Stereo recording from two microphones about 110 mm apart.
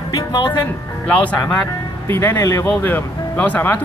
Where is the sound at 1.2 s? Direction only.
15° left (ahead or behind).